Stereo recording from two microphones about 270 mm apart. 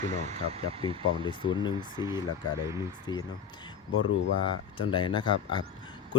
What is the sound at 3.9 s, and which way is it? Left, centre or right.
Speech, left.